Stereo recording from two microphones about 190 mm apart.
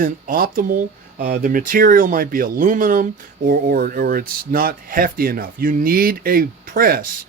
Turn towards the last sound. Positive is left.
turn(degrees=-50)  # may be behind; listen again after turning